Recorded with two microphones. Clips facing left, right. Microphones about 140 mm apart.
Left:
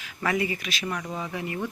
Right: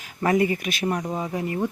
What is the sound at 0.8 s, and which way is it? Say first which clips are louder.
Speech: right 6 dB; 35° right (ahead or behind).